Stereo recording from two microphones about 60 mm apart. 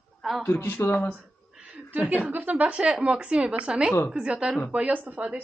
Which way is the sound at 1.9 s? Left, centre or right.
Right.